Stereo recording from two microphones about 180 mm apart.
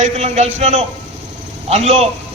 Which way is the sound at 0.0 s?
40° right (ahead or behind).